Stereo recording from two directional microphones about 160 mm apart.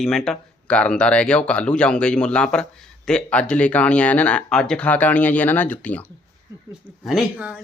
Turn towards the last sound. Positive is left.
turn(degrees=-5)  # may be behind; listen again after turning